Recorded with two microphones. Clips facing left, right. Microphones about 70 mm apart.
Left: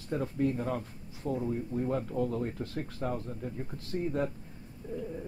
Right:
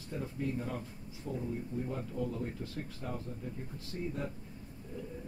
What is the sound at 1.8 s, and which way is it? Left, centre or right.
Speech, left.